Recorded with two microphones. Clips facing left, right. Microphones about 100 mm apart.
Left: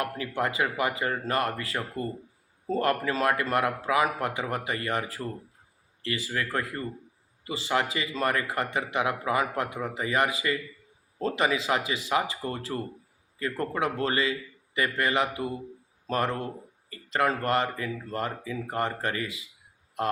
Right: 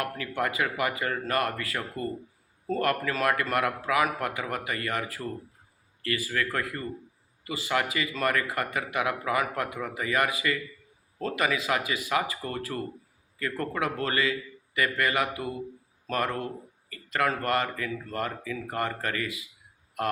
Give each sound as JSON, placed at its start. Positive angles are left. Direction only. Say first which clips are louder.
{"t": 0.0, "sound": "speech", "louder": "left 1 dB", "side_deg": 25}